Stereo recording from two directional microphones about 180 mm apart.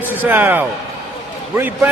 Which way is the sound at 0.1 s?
10° right (ahead or behind).